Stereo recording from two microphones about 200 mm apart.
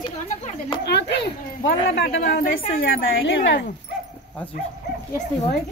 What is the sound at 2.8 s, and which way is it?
Speech, 70° left (ahead or behind).